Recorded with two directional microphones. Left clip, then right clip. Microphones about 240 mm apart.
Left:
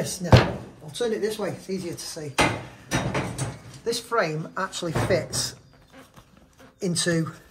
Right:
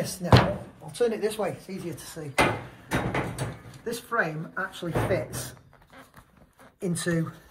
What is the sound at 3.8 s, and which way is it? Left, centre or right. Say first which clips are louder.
Speech: left 3 dB; left.